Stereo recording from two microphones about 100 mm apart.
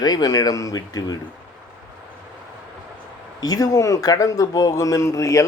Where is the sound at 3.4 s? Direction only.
40° left (ahead or behind).